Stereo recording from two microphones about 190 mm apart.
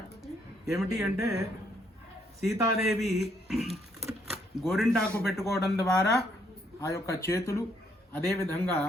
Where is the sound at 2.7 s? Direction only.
Centre (ahead or behind).